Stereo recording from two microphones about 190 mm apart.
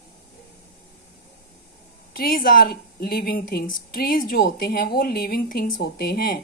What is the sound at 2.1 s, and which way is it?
Speech, 50° left (ahead or behind).